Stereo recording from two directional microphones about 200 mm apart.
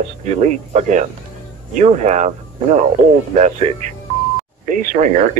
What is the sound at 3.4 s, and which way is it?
Speech, 35° right (ahead or behind).